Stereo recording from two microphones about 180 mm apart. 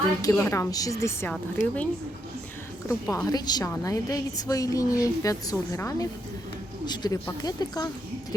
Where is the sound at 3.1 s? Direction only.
20° left (ahead or behind).